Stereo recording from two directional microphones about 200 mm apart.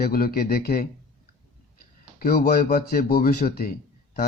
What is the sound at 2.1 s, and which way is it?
A man's voice, 50° left (ahead or behind).